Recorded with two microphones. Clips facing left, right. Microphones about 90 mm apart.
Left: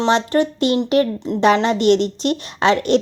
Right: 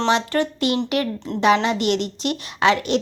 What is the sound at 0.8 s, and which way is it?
Speech, 30° left (ahead or behind).